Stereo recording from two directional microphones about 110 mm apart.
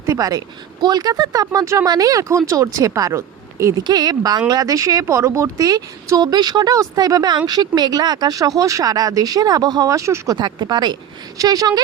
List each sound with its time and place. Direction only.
0.1 s speech: 35° right (ahead or behind)
10.3 s speech: 40° right (ahead or behind)